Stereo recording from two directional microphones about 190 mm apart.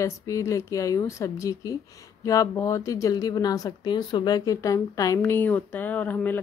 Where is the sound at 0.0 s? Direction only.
15° left (ahead or behind).